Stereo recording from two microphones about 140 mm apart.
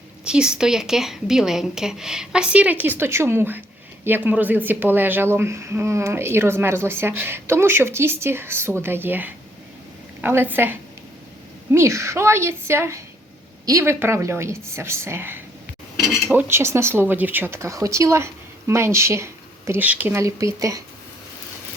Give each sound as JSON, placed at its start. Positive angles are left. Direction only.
{"t": 0.3, "sound": "speech", "side_deg": -5}
{"t": 16.0, "sound": "speech", "side_deg": 0}
{"t": 16.3, "sound": "speech", "side_deg": -15}